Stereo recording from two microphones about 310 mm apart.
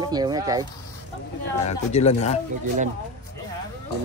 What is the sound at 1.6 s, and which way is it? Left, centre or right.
Speech, left.